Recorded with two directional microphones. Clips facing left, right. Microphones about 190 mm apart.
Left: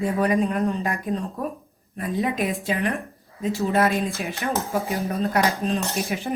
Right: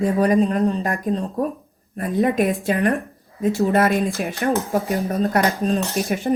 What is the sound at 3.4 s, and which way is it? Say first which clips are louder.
Speech: right 4 dB; 50° right (ahead or behind).